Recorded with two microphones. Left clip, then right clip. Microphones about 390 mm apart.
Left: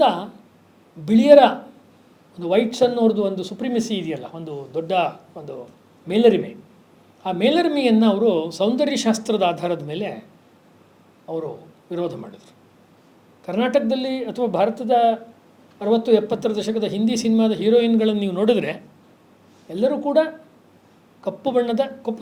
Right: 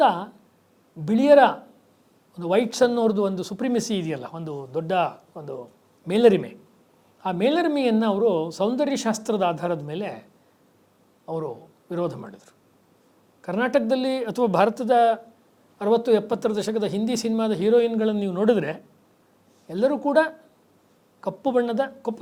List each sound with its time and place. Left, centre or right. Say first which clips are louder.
0.0 s a sound: left 2 dB; right
1.0 s speech: left 4 dB; right
11.3 s speech: left 2 dB; right
13.4 s speech: left 3 dB; right